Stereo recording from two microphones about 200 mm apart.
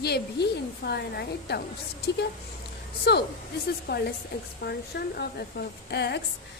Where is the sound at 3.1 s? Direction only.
55° left (ahead or behind).